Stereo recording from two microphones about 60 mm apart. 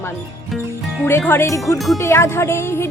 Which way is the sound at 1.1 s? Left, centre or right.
Left.